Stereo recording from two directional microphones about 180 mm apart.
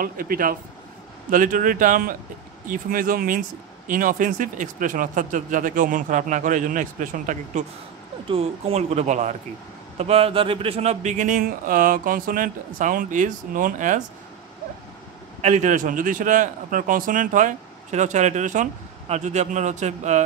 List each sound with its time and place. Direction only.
0.0 s speech: 50° right (ahead or behind)
8.3 s speech: 35° right (ahead or behind)
15.4 s speech: 40° right (ahead or behind)